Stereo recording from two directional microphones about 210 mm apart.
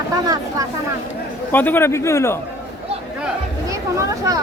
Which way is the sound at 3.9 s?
15° right (ahead or behind).